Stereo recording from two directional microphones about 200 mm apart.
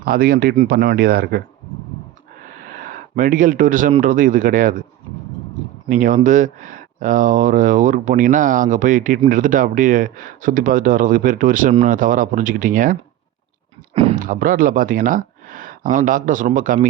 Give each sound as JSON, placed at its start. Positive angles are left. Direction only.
{"t": 0.0, "sound": "speech", "side_deg": -45}
{"t": 2.6, "sound": "a sound", "side_deg": -45}
{"t": 4.0, "sound": "speech", "side_deg": -40}
{"t": 5.9, "sound": "speech", "side_deg": -40}
{"t": 13.9, "sound": "a sound", "side_deg": -30}
{"t": 14.2, "sound": "speech", "side_deg": -45}